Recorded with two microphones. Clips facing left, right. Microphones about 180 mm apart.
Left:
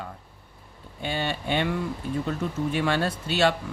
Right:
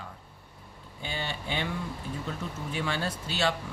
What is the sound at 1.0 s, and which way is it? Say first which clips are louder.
Speech: left 7 dB; 60° left (ahead or behind).